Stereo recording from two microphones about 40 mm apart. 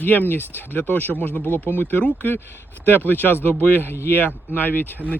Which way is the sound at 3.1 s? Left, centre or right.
Left.